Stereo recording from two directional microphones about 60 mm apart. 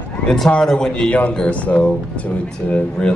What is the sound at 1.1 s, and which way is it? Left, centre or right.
Speech, left.